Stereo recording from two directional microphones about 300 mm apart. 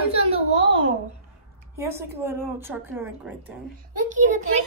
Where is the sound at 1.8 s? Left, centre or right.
Centre.